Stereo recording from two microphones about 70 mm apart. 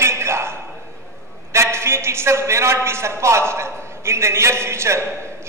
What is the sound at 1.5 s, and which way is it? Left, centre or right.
A man's voice, right.